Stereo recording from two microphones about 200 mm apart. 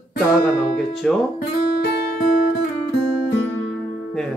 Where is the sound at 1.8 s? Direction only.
50° left (ahead or behind).